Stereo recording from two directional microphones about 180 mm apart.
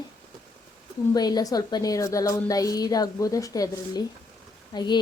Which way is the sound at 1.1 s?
20° left (ahead or behind).